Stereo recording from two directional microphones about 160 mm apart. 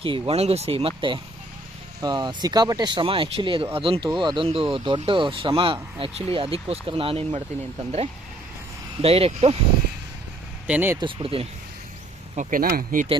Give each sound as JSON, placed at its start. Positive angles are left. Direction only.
{"t": 0.0, "sound": "speech", "side_deg": -35}
{"t": 9.0, "sound": "speech", "side_deg": -40}
{"t": 10.7, "sound": "speech", "side_deg": -10}
{"t": 11.0, "sound": "speech", "side_deg": -35}
{"t": 12.4, "sound": "speech", "side_deg": -60}